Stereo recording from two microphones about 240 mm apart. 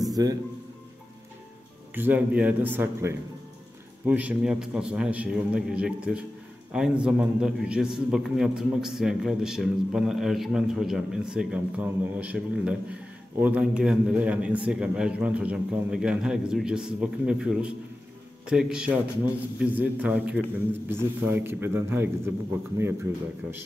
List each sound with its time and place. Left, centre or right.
0.0 s music: centre
2.0 s a man's voice: centre